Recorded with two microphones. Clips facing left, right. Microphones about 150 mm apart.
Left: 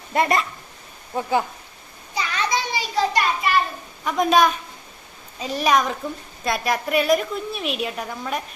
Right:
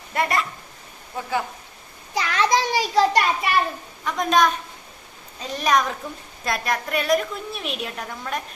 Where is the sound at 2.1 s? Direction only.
90° right.